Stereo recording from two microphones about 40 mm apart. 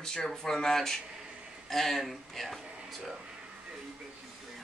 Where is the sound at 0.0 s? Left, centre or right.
Centre.